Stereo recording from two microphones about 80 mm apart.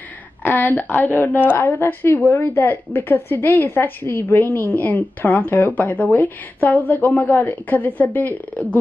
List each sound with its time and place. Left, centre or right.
0.4 s a woman's voice: left